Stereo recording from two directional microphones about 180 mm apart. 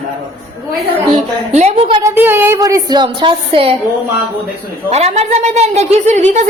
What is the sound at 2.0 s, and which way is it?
Speech, 10° right (ahead or behind).